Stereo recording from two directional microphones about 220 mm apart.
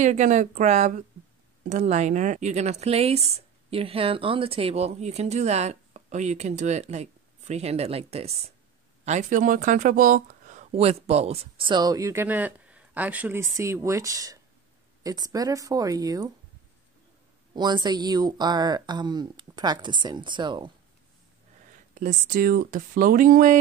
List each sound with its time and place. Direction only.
0.0 s speech: 35° right (ahead or behind); by 16.3 s 15° right (ahead or behind)
17.6 s speech: 20° right (ahead or behind)
21.9 s speech: 35° right (ahead or behind)